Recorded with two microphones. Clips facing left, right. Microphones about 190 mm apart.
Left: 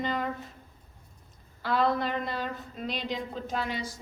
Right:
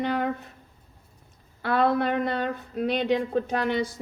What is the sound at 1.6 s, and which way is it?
A woman's voice, 60° right (ahead or behind).